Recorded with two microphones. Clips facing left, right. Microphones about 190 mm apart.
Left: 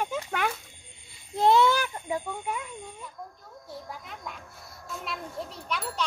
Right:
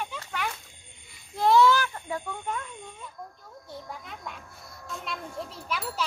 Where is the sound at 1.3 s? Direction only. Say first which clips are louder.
Right 1 dB; 25° left (ahead or behind).